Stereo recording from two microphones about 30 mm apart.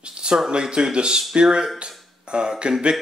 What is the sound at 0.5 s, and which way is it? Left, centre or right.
A man's voice, right.